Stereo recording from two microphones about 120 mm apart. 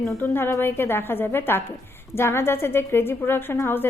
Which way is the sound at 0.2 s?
20° left (ahead or behind).